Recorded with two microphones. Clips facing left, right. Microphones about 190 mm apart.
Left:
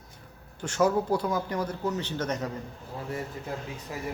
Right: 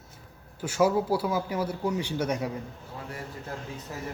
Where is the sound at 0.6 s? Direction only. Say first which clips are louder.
Right 1 dB; 10° right (ahead or behind).